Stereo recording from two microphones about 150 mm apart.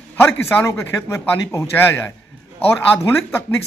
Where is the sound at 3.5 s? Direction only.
15° left (ahead or behind).